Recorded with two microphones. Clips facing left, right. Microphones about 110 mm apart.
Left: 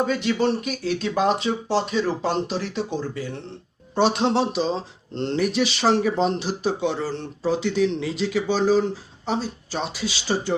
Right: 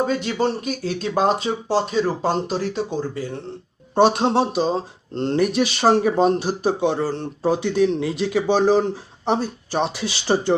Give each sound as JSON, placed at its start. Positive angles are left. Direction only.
{"t": 0.0, "sound": "speech", "side_deg": -40}